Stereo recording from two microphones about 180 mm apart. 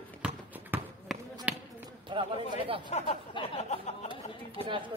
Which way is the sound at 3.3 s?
30° left (ahead or behind).